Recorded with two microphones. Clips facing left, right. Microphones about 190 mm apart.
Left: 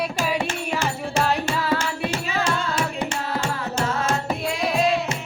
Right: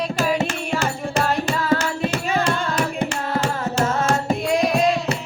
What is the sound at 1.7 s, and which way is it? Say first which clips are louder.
Hands: right 3 dB; 45° right (ahead or behind).